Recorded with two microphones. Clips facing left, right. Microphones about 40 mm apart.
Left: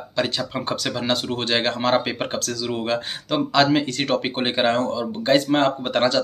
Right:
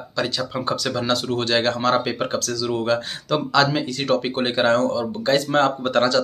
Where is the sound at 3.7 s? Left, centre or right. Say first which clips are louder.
Even; left.